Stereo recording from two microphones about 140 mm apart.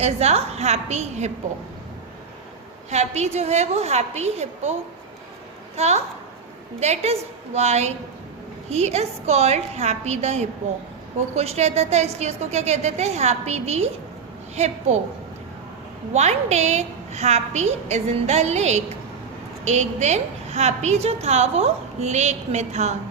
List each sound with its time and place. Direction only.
0.0 s a woman's voice: 50° right (ahead or behind)
2.9 s a woman's voice: 55° right (ahead or behind)
5.7 s a woman's voice: 50° right (ahead or behind)
16.1 s a woman's voice: 50° right (ahead or behind)